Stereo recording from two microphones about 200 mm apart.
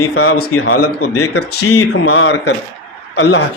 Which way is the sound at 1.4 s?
90° left.